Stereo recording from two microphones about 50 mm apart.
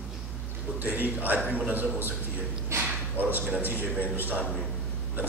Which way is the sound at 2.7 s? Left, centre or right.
Right.